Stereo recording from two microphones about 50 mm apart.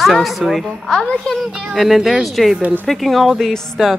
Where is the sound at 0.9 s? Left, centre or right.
Centre.